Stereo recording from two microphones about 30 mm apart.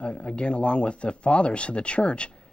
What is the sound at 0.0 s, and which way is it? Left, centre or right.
Speech, left.